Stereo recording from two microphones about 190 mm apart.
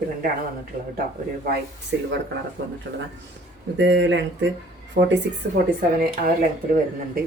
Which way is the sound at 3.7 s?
70° right (ahead or behind).